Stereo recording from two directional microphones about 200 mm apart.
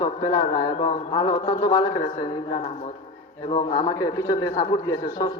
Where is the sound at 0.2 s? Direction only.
20° left (ahead or behind).